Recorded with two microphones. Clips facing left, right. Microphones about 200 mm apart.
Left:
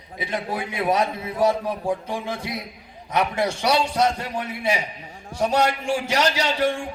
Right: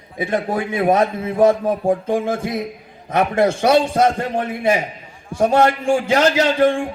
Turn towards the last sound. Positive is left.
turn(degrees=-50)  # may be behind; listen again after turning